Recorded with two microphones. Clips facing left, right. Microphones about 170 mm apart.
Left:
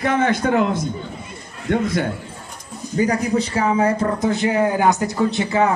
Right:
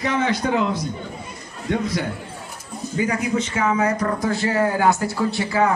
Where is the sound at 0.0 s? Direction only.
55° left (ahead or behind).